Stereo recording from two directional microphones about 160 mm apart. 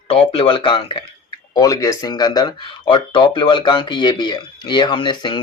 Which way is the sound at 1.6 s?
20° left (ahead or behind).